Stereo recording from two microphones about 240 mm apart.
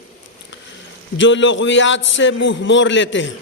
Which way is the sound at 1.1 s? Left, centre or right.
Left.